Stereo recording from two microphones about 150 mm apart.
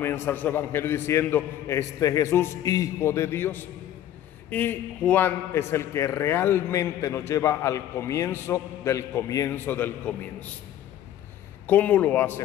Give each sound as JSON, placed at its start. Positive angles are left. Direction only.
{"t": 0.0, "sound": "a man's voice", "side_deg": 15}
{"t": 11.6, "sound": "a man's voice", "side_deg": 10}